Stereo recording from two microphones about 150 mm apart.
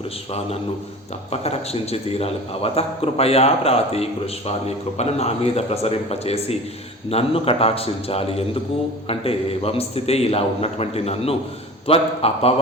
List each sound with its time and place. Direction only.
1.3 s a man's voice: 45° left (ahead or behind)